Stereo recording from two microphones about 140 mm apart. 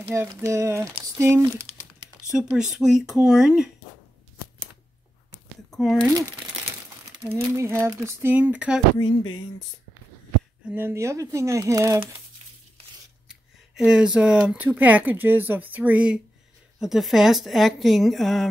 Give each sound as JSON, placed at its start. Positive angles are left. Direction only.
{"t": 0.1, "sound": "speech", "side_deg": -20}
{"t": 2.3, "sound": "a woman's voice", "side_deg": -5}
{"t": 5.7, "sound": "speech", "side_deg": 0}
{"t": 7.2, "sound": "speech", "side_deg": -20}
{"t": 10.7, "sound": "speech", "side_deg": -15}
{"t": 13.3, "sound": "a woman's voice", "side_deg": -5}